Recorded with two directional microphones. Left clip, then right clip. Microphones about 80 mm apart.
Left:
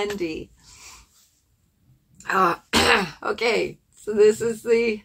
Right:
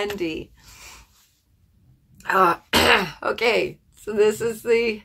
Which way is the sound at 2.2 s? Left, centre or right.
Right.